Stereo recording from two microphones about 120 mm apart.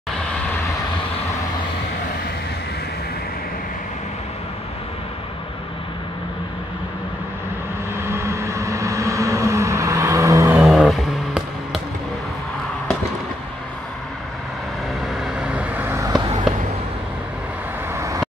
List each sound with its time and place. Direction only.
7.9 s vehicle: 20° right (ahead or behind)
10.7 s music: centre (ahead or behind)
15.4 s vehicle: 10° right (ahead or behind)
16.5 s a sound: centre (ahead or behind)
17.9 s vehicle: 25° right (ahead or behind)